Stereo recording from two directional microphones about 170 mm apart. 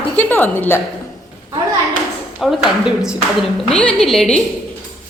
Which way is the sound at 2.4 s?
Centre (ahead or behind).